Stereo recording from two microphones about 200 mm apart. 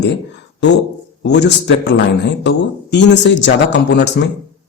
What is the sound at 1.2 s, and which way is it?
Speech, 60° left (ahead or behind).